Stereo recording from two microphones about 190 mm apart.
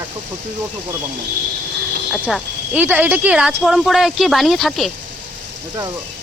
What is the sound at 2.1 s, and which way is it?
Speech, 5° left (ahead or behind).